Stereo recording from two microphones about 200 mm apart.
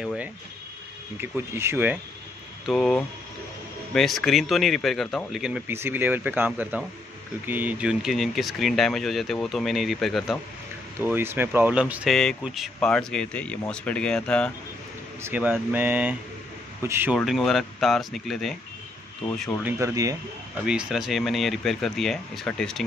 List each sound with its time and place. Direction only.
0.0 s a sound: 5° right (ahead or behind)
1.2 s speech: 10° right (ahead or behind)
2.6 s speech: centre (ahead or behind)
11.0 s speech: 10° right (ahead or behind); by 14.5 s 5° left (ahead or behind)
15.2 s speech: 10° right (ahead or behind)
17.2 s speech: centre (ahead or behind)
19.6 s speech: 15° right (ahead or behind)
20.6 s speech: 5° right (ahead or behind)